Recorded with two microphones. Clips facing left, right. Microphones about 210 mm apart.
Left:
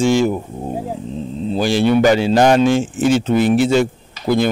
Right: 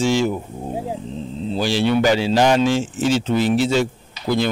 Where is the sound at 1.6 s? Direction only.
50° left (ahead or behind).